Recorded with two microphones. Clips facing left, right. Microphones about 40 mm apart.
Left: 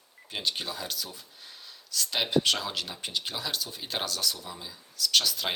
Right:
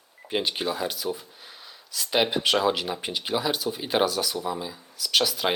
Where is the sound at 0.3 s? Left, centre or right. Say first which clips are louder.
Right 6 dB; right.